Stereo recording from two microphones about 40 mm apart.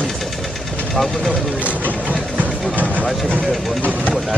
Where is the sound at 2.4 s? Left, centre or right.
Right.